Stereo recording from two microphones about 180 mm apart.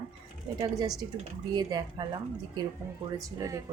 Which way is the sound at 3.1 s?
20° right (ahead or behind).